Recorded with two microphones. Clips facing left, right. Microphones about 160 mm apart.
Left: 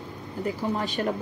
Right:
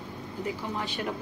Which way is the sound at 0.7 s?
40° left (ahead or behind).